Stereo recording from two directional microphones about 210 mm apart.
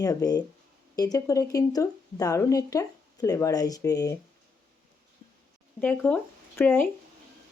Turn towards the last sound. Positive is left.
turn(degrees=10)  # may be behind; listen again after turning